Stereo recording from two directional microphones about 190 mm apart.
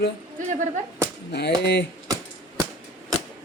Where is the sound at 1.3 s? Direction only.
60° left (ahead or behind).